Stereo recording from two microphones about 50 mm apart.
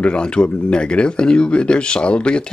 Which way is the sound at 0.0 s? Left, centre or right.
Left.